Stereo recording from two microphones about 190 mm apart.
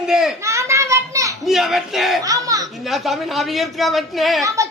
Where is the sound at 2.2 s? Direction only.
20° right (ahead or behind).